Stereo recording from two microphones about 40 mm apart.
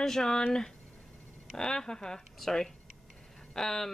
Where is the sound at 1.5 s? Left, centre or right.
Centre.